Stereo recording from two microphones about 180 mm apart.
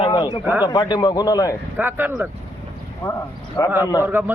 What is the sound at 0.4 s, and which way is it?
Speech, 10° right (ahead or behind).